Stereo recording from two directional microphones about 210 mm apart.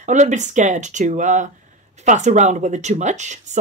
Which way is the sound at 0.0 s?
35° right (ahead or behind).